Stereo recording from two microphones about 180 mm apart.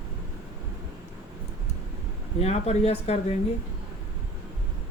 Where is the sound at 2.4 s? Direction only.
35° left (ahead or behind).